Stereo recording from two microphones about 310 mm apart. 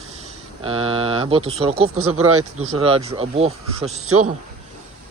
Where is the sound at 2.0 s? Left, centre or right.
Right.